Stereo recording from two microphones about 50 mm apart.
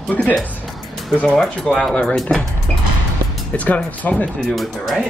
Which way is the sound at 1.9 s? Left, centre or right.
Left.